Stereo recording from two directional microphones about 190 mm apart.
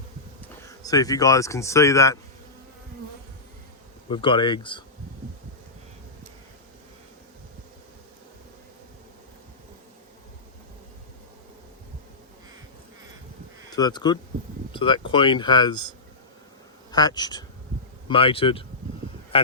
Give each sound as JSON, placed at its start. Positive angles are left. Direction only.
{"t": 0.8, "sound": "speech", "side_deg": 20}
{"t": 4.1, "sound": "speech", "side_deg": 25}
{"t": 13.7, "sound": "speech", "side_deg": 20}
{"t": 16.9, "sound": "speech", "side_deg": 20}